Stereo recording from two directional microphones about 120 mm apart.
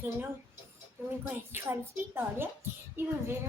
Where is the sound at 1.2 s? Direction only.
20° right (ahead or behind).